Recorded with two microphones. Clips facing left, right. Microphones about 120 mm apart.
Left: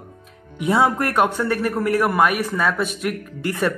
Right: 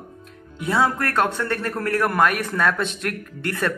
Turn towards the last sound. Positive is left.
turn(degrees=15)  # may be behind; listen again after turning